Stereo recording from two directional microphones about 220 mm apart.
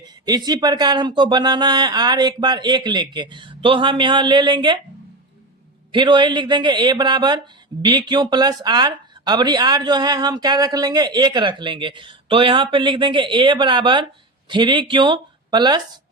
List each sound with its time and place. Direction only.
0.0 s speech: 20° right (ahead or behind)
5.9 s speech: 20° right (ahead or behind)